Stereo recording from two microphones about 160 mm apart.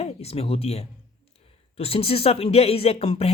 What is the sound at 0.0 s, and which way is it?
Speech, 40° left (ahead or behind).